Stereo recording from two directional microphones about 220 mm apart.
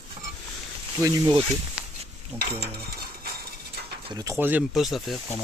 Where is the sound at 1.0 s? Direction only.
15° right (ahead or behind).